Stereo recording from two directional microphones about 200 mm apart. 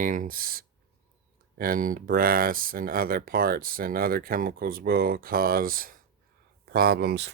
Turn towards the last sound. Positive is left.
turn(degrees=-55)  # may be behind; listen again after turning